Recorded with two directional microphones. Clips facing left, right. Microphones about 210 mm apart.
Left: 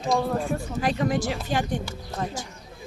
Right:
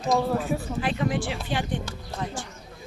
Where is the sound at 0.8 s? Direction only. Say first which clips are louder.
Left 5 dB; 40° left (ahead or behind).